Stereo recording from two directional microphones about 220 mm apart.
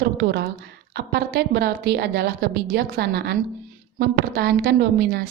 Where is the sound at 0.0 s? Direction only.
50° right (ahead or behind).